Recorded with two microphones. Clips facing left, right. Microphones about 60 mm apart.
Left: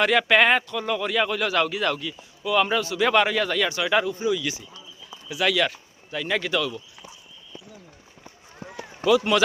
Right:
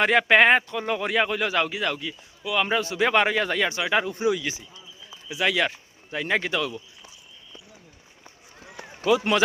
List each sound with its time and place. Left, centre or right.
0.0 s a man's voice: right
2.6 s a man's voice: right